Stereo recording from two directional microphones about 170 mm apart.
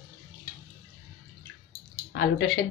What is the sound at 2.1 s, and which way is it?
Speech, 60° left (ahead or behind).